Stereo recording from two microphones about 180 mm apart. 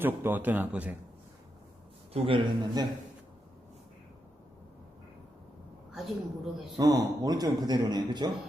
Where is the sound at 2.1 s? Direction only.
30° right (ahead or behind).